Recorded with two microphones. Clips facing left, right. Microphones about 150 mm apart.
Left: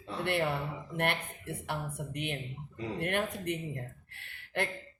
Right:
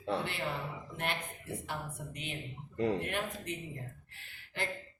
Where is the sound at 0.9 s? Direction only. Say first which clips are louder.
Left 6 dB; 60° left (ahead or behind).